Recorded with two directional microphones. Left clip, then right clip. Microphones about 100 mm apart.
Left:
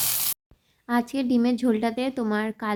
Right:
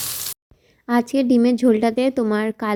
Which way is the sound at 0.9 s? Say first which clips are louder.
Right 6 dB; 45° right (ahead or behind).